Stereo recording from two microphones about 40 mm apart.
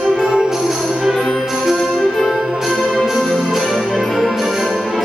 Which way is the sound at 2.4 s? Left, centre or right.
Centre.